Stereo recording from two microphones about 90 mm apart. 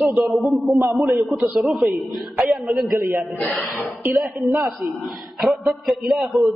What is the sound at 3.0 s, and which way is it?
Speech, 30° right (ahead or behind).